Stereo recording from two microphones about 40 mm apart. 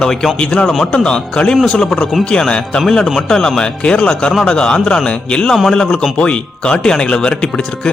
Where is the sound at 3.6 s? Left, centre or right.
Left.